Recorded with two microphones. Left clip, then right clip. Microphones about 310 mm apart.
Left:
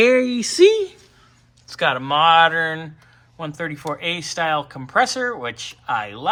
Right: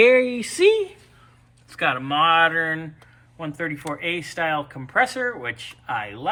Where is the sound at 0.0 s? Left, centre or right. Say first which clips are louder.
Even; centre.